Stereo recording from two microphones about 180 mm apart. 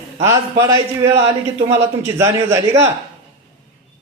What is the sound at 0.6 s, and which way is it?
A man's voice, 15° right (ahead or behind).